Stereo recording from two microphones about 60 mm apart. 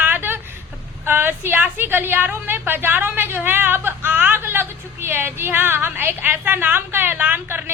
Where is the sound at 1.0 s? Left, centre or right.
Right.